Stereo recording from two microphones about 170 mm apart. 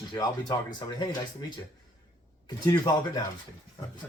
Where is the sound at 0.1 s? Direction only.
25° left (ahead or behind).